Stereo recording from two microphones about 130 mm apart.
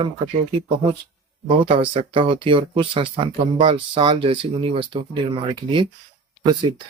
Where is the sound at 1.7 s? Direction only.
45° right (ahead or behind).